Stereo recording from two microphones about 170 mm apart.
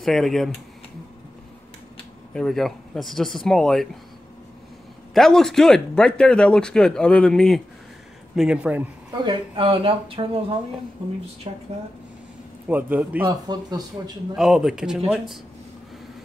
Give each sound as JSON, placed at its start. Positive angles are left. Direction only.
{"t": 0.0, "sound": "speech", "side_deg": 0}
{"t": 2.3, "sound": "speech", "side_deg": 0}
{"t": 5.1, "sound": "speech", "side_deg": 5}
{"t": 9.1, "sound": "speech", "side_deg": -25}
{"t": 11.5, "sound": "speech", "side_deg": -35}
{"t": 12.6, "sound": "a man's voice", "side_deg": -10}
{"t": 13.3, "sound": "speech", "side_deg": -25}
{"t": 14.3, "sound": "speech", "side_deg": 0}